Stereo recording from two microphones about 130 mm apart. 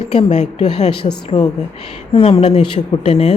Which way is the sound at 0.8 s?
55° left (ahead or behind).